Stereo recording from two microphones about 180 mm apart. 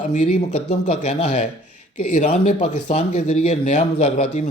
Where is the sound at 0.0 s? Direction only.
40° left (ahead or behind).